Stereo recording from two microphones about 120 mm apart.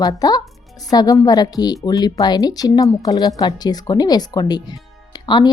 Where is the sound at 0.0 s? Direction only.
30° left (ahead or behind).